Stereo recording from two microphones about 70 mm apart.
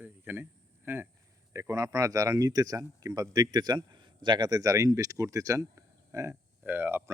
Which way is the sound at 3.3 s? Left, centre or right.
Right.